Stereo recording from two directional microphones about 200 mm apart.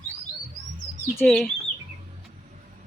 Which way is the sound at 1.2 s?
Centre (ahead or behind).